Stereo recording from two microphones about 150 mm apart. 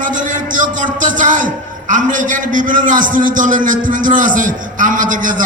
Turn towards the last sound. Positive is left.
turn(degrees=-60)  # may be behind; listen again after turning